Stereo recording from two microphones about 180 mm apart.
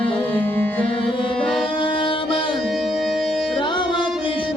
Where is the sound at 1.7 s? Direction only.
30° left (ahead or behind).